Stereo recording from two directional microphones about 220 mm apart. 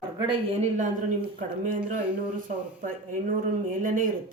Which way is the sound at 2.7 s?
40° right (ahead or behind).